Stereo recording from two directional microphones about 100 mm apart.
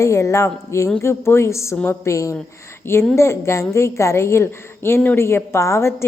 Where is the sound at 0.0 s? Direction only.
30° left (ahead or behind).